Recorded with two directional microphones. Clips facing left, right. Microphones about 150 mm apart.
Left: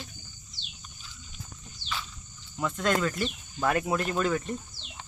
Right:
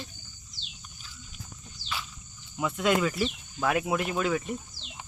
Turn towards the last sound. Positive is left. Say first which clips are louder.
# even
turn(degrees=-10)  # may be behind; listen again after turning